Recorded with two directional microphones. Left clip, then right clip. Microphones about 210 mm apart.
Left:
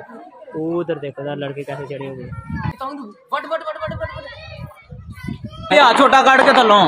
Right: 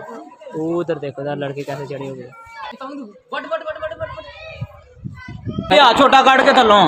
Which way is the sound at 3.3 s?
35° left (ahead or behind).